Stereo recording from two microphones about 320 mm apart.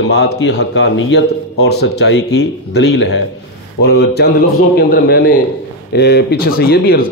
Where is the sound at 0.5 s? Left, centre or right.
Left.